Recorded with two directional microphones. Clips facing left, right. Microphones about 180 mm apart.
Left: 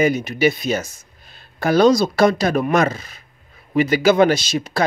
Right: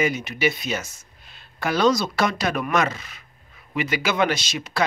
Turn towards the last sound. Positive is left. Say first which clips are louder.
# left 5 dB
turn(degrees=35)  # may be behind; listen again after turning